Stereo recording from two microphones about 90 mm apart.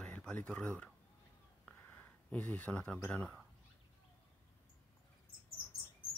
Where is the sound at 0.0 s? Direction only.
10° left (ahead or behind).